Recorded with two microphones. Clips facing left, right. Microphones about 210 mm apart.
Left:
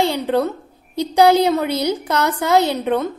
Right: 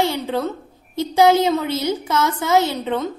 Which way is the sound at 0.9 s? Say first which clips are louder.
Left 1 dB; 15° left (ahead or behind).